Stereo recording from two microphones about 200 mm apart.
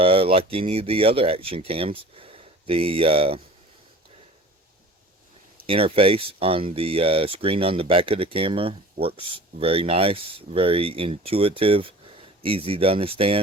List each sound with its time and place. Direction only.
0.0 s speech: 30° right (ahead or behind)
5.6 s speech: 30° right (ahead or behind)